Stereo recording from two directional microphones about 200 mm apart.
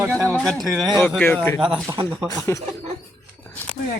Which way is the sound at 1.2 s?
10° left (ahead or behind).